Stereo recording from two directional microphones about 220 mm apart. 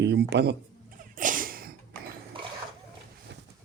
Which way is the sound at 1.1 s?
35° right (ahead or behind).